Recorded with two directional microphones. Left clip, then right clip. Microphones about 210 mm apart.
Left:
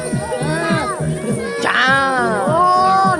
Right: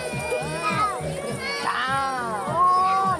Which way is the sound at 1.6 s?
50° left (ahead or behind).